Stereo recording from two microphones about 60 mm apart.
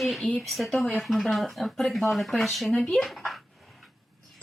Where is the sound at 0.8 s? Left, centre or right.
Centre.